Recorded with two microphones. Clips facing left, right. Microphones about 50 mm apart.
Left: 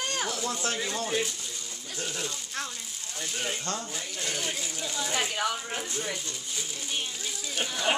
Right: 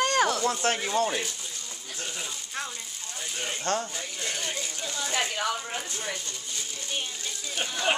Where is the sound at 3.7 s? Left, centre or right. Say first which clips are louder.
Right 11 dB; right.